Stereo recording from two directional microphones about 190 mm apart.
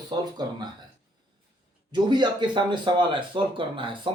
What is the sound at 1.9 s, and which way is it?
Speech, 25° right (ahead or behind).